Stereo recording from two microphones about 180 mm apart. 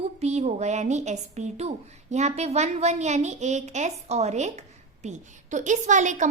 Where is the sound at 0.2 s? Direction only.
40° right (ahead or behind).